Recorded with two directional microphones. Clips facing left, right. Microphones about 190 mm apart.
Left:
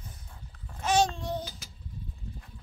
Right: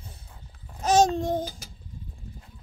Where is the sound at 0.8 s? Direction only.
40° right (ahead or behind).